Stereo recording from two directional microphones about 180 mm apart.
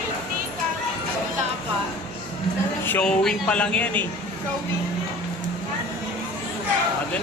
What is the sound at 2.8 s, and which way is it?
Speech, 5° left (ahead or behind).